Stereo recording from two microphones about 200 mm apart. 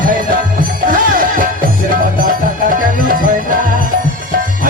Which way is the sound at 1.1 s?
45° right (ahead or behind).